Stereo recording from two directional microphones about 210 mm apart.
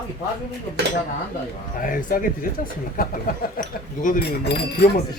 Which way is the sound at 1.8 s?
40° left (ahead or behind).